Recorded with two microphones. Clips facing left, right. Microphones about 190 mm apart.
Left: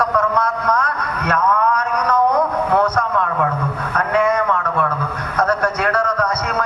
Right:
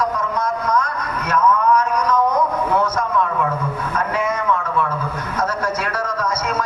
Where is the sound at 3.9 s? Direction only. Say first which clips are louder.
Left 6 dB; 65° left (ahead or behind).